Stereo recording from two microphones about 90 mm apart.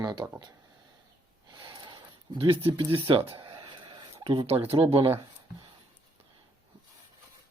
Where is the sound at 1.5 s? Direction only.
60° right (ahead or behind).